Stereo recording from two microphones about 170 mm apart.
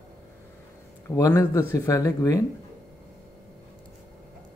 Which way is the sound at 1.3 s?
15° left (ahead or behind).